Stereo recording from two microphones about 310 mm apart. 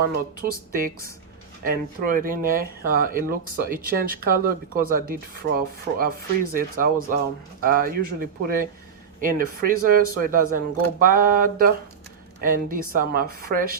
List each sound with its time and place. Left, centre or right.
0.4 s speech: right